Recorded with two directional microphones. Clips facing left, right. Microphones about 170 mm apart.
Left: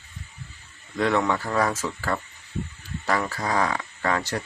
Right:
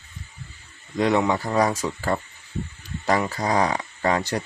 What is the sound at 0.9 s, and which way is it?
Speech, 15° right (ahead or behind).